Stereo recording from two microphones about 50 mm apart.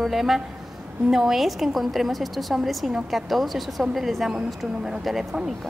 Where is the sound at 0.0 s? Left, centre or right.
Centre.